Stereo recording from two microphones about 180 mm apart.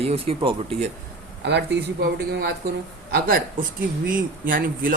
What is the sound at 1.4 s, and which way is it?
Speech, 70° right (ahead or behind).